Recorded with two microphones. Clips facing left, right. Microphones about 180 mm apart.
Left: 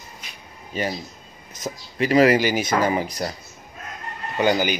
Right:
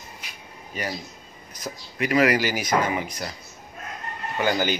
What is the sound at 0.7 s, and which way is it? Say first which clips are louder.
Speech: left 5 dB; 25° left (ahead or behind).